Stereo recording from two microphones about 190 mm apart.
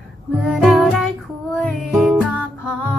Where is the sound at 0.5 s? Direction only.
5° right (ahead or behind).